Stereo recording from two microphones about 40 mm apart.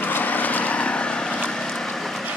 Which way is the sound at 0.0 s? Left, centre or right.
Left.